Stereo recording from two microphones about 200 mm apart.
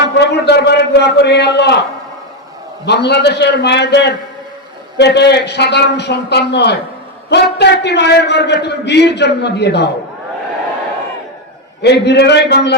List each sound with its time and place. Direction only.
0.2 s a man's voice: 55° left (ahead or behind)
2.8 s a man's voice: 55° left (ahead or behind)
11.8 s a man's voice: 55° left (ahead or behind)